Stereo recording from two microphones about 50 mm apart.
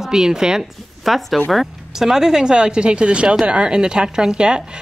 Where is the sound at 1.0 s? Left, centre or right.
Centre.